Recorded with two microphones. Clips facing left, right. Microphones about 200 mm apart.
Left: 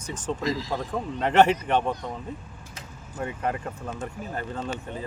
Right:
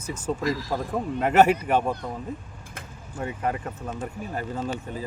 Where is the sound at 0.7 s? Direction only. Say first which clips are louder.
Right 2 dB; 10° right (ahead or behind).